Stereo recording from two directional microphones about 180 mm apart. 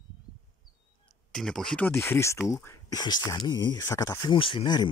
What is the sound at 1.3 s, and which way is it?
Speech, 5° left (ahead or behind).